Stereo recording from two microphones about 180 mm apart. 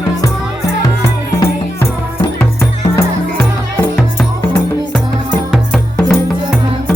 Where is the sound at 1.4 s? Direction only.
15° left (ahead or behind).